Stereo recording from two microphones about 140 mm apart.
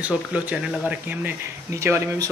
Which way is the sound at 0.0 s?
10° right (ahead or behind).